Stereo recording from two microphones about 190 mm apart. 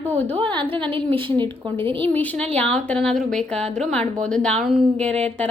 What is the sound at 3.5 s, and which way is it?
Speech, 35° right (ahead or behind).